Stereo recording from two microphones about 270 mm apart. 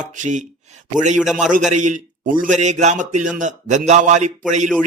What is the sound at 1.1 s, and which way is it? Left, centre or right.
Speech, centre.